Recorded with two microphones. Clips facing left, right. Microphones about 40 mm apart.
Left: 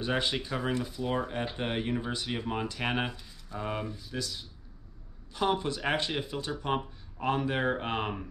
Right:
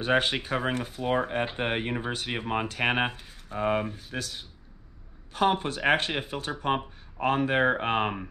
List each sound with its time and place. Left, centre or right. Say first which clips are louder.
0.0 s speech: right 5 dB; right